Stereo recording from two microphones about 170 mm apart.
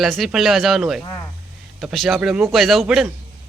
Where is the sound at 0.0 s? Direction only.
Centre (ahead or behind).